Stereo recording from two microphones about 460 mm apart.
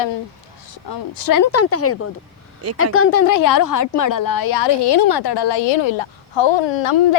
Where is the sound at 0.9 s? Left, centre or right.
Left.